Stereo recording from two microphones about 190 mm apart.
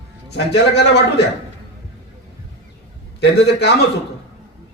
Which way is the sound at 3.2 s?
60° left (ahead or behind).